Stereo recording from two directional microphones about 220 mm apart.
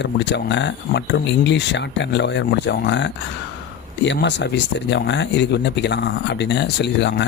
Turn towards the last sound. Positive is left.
turn(degrees=50)  # may be behind; listen again after turning